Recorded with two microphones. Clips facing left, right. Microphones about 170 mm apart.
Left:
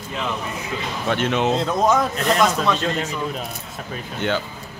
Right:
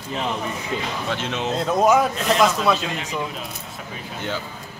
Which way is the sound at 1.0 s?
60° left (ahead or behind).